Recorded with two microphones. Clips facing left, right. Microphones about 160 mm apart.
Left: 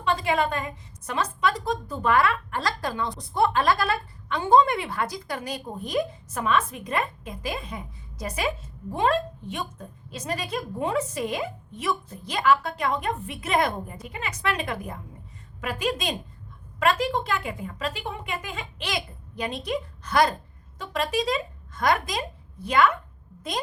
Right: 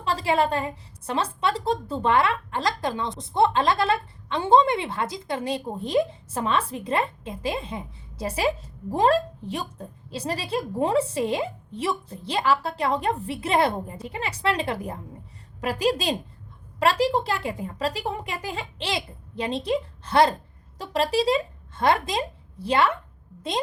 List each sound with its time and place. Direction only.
0.0 s a woman's voice: 30° right (ahead or behind)